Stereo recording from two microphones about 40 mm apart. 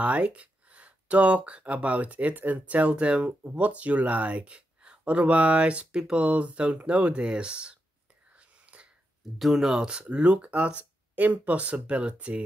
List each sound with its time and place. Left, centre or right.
0.0 s speech: right
5.9 s speech: centre
6.2 s speech: right
8.4 s whispering: right
9.4 s speech: centre; by 12.4 s right